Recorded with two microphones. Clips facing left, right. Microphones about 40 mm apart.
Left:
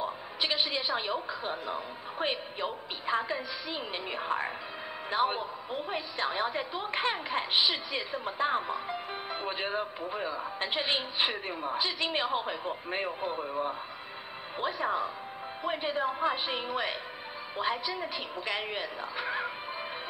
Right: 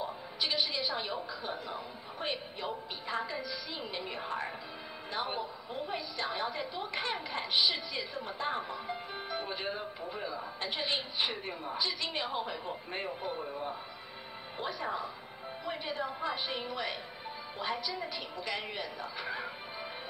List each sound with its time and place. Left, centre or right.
0.0 s a woman's voice: left